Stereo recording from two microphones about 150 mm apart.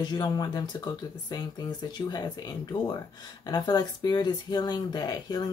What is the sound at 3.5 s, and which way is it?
Speech, 25° left (ahead or behind).